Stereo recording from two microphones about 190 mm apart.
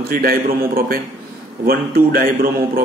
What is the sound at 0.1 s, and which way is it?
A man's voice, 50° right (ahead or behind).